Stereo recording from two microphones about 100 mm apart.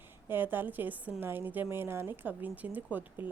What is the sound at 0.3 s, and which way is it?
Speech, 20° right (ahead or behind).